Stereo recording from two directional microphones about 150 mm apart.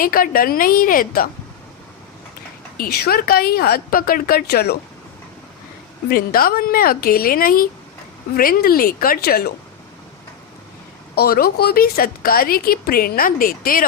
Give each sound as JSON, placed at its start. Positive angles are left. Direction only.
{"t": 0.0, "sound": "speech", "side_deg": 70}
{"t": 2.7, "sound": "a woman's voice", "side_deg": 85}
{"t": 6.1, "sound": "a woman's voice", "side_deg": 75}
{"t": 11.1, "sound": "a woman's voice", "side_deg": 90}